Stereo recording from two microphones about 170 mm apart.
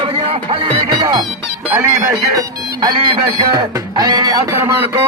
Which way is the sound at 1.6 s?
15° right (ahead or behind).